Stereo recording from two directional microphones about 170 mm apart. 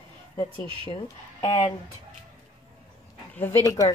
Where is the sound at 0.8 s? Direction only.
25° left (ahead or behind).